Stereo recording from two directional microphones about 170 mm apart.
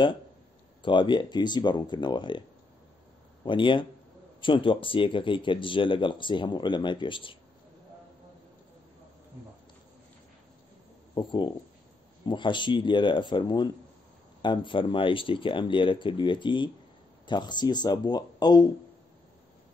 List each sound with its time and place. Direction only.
0.8 s speech: 30° left (ahead or behind)
3.4 s speech: 30° left (ahead or behind)
11.1 s speech: 25° left (ahead or behind)